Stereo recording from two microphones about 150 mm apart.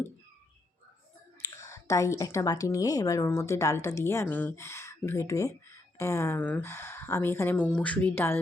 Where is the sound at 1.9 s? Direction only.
20° left (ahead or behind).